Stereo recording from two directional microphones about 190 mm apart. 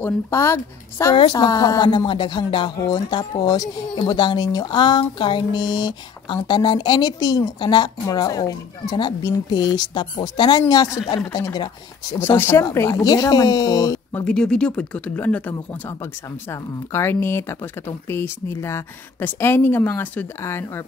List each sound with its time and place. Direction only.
0.0 s speech: 15° left (ahead or behind)
14.2 s speech: 5° left (ahead or behind)